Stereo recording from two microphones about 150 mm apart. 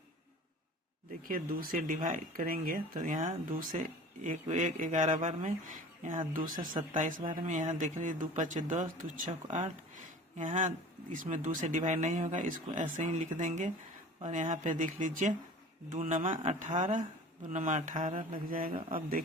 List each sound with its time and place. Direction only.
1.2 s speech: 70° right (ahead or behind)
7.4 s speech: 55° right (ahead or behind)
9.9 s a sound: 55° right (ahead or behind)
11.1 s speech: 60° right (ahead or behind)